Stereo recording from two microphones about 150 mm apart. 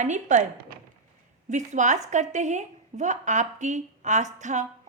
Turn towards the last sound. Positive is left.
turn(degrees=-50)  # may be behind; listen again after turning